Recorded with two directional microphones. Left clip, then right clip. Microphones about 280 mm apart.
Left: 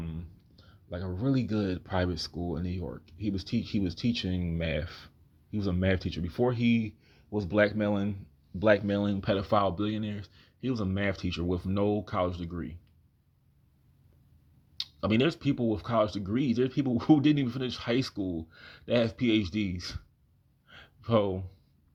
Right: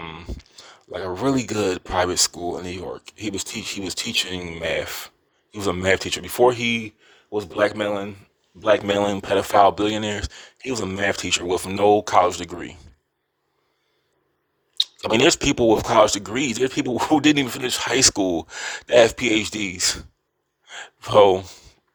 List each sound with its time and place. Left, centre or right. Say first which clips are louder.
0.0 s speech: right 11 dB; right
14.8 s speech: right 10 dB; right